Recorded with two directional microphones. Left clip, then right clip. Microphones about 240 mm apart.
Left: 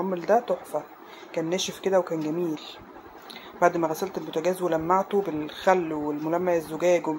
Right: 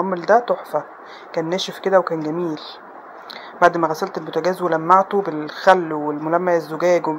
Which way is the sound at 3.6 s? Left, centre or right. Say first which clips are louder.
Right 7 dB; centre.